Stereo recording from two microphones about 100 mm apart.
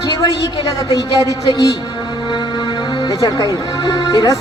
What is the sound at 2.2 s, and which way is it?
Music, 50° left (ahead or behind).